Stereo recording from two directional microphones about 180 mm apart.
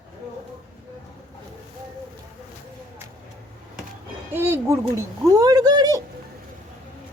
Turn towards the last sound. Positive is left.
turn(degrees=-20)  # may be behind; listen again after turning